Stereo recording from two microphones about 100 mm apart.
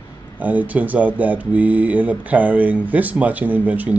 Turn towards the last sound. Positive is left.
turn(degrees=-15)  # may be behind; listen again after turning